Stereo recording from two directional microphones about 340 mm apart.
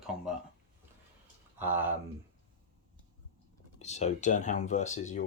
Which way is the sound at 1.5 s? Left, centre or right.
Centre.